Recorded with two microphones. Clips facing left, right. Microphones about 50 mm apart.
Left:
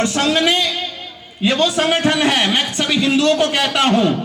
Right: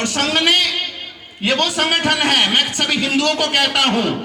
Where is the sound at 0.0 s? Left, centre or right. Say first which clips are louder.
Left 2 dB; right.